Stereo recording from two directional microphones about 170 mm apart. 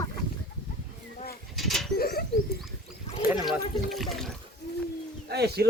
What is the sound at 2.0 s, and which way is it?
Bird, 65° left (ahead or behind).